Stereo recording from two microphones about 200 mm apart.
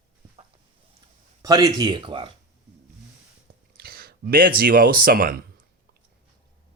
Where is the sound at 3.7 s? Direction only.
50° right (ahead or behind).